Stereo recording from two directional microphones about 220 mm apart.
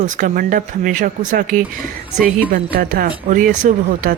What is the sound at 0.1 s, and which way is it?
Speech, 35° right (ahead or behind).